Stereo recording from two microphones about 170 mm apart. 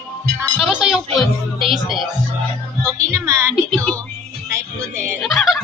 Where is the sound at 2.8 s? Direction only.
15° right (ahead or behind).